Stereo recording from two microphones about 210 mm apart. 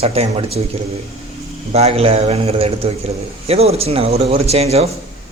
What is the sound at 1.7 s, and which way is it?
A man's voice, 30° right (ahead or behind).